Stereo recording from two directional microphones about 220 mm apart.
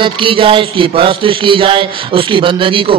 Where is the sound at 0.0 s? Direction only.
25° right (ahead or behind).